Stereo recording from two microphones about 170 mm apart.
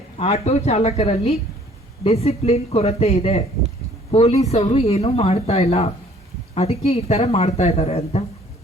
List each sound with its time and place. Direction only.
0.2 s speech: 40° left (ahead or behind)